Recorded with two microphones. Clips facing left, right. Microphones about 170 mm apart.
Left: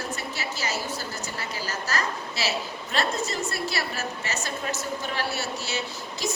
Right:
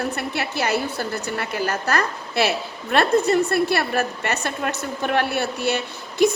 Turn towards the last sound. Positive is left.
turn(degrees=-55)  # may be behind; listen again after turning